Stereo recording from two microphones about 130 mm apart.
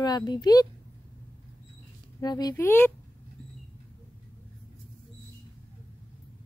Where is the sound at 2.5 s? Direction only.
15° left (ahead or behind).